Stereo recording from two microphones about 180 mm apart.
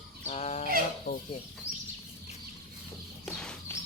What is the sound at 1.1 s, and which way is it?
Speech, 50° left (ahead or behind).